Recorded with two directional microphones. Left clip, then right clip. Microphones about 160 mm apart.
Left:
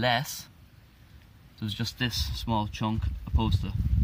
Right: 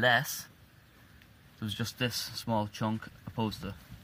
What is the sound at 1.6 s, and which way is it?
Speech, 25° right (ahead or behind).